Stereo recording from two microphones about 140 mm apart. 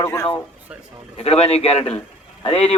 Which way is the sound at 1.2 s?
45° left (ahead or behind).